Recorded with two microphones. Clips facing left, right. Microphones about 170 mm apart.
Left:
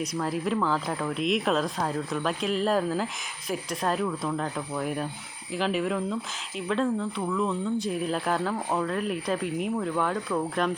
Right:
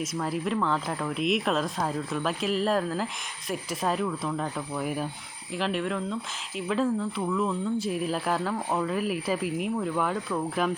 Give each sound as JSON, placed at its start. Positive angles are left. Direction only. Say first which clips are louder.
{"t": 0.0, "sound": "speech", "louder": "left 1 dB", "side_deg": 0}